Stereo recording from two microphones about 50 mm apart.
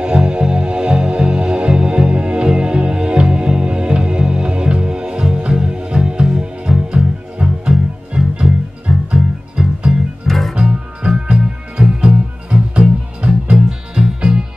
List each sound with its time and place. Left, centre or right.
0.0 s music: centre
10.2 s music: centre
10.5 s music: centre